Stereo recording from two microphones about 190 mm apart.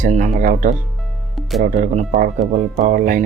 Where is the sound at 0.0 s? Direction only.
40° right (ahead or behind).